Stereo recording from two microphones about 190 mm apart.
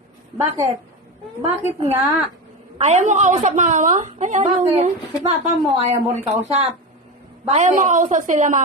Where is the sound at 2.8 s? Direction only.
35° right (ahead or behind).